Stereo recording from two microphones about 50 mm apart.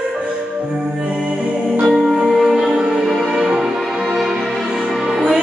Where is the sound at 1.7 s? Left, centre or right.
Centre.